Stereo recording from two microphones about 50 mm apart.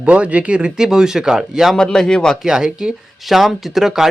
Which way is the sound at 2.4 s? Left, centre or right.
Centre.